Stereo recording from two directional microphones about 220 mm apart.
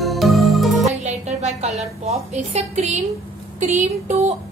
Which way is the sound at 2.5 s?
30° right (ahead or behind).